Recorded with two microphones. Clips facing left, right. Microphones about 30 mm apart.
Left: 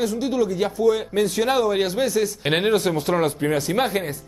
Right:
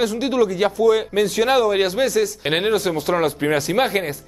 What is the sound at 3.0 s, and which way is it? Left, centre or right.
Speech, centre.